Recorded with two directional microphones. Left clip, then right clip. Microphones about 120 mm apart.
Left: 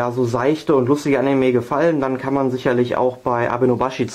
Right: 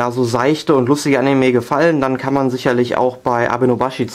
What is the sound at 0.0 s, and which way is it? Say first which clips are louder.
Speech: right 3 dB; 35° right (ahead or behind).